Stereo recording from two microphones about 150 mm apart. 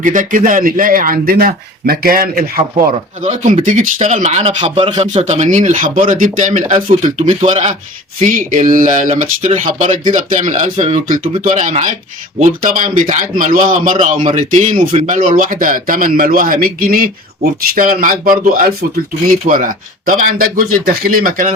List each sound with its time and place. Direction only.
0.0 s a man's voice: 60° right (ahead or behind)